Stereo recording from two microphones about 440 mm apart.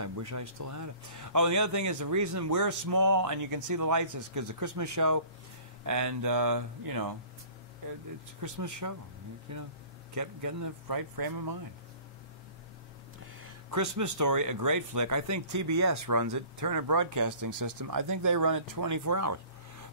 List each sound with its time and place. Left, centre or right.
0.0 s speech: right
8.4 s speech: right
13.4 s speech: right